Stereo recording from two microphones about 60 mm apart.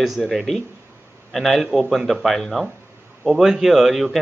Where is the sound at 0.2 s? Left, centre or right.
Centre.